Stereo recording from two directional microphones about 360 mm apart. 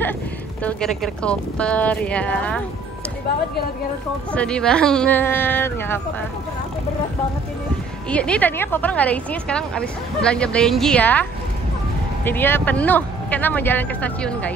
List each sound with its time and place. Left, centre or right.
0.6 s a woman's voice: centre
4.3 s a woman's voice: centre
8.1 s a woman's voice: centre
12.3 s a woman's voice: centre